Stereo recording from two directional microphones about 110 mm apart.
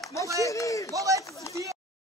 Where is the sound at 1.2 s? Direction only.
30° left (ahead or behind).